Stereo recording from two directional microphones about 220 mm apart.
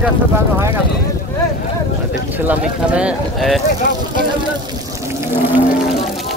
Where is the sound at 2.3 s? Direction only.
5° right (ahead or behind).